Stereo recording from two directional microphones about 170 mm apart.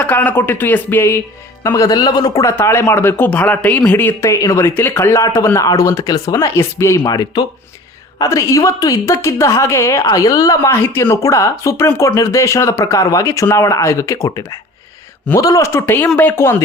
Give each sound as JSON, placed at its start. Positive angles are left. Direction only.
{"t": 0.0, "sound": "a woman's voice", "side_deg": 10}